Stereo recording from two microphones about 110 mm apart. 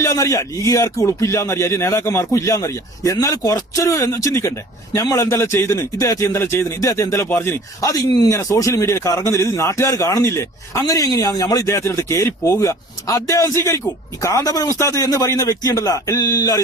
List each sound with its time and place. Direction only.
0.0 s a man's voice: 30° left (ahead or behind)